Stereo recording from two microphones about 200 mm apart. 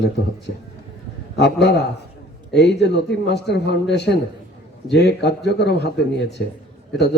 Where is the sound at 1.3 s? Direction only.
60° left (ahead or behind).